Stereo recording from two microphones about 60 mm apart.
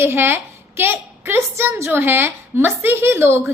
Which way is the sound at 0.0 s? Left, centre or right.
Right.